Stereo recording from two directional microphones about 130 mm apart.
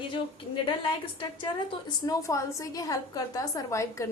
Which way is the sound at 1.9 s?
25° left (ahead or behind).